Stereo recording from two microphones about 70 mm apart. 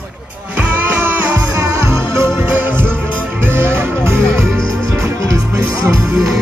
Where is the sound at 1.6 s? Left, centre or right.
Right.